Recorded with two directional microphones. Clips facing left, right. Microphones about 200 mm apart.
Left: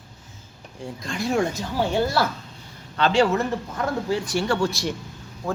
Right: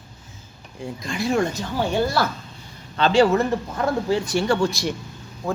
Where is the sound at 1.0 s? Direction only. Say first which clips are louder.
Right 2 dB; 5° right (ahead or behind).